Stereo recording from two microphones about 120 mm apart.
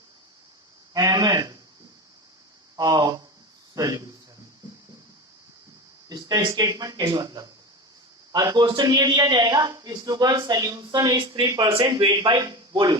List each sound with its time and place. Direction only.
0.9 s speech: 30° right (ahead or behind)
2.7 s a man's voice: 30° right (ahead or behind)
6.1 s a man's voice: 35° right (ahead or behind)
11.2 s speech: 45° right (ahead or behind)
11.4 s a man's voice: 30° right (ahead or behind)
11.7 s a man's voice: 40° right (ahead or behind)